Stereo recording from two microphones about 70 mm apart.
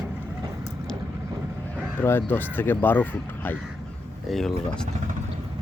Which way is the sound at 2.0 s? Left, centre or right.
Left.